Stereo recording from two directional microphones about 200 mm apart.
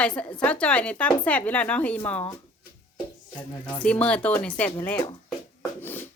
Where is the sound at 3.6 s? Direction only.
5° left (ahead or behind).